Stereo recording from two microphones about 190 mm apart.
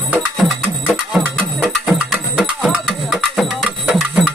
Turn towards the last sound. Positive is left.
turn(degrees=0)  # may be behind; listen again after turning